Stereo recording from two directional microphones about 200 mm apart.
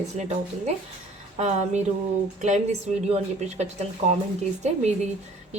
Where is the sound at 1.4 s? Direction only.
35° right (ahead or behind).